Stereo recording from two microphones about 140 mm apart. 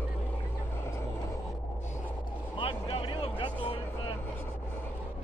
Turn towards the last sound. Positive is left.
turn(degrees=40)  # may be behind; listen again after turning